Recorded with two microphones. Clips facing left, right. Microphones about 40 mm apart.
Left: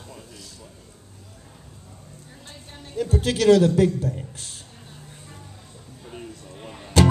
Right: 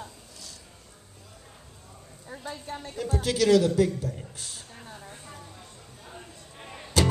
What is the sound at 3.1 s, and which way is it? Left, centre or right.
A man's voice, left.